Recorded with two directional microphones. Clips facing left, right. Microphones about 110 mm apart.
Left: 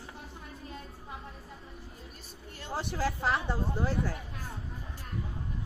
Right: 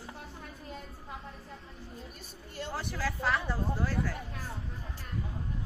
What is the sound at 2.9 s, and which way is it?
Speech, 20° left (ahead or behind).